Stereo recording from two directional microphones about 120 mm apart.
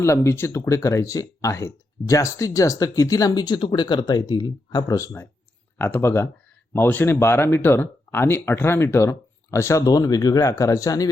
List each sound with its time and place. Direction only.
0.0 s speech: 25° left (ahead or behind)